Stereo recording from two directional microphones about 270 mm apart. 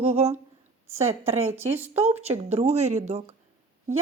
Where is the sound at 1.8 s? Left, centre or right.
Centre.